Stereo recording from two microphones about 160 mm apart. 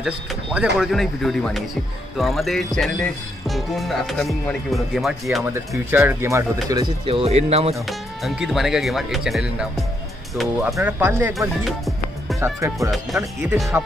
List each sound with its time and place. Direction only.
0.0 s speech: 5° right (ahead or behind)
5.9 s speech: 15° right (ahead or behind)
7.1 s speech: 40° right (ahead or behind)
7.8 s speech: centre (ahead or behind)
11.3 s music: centre (ahead or behind)
12.4 s speech: 15° right (ahead or behind)